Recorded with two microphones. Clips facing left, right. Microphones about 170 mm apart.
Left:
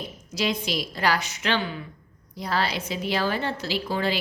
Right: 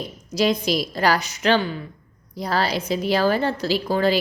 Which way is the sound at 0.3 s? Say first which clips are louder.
Right 7 dB; 40° right (ahead or behind).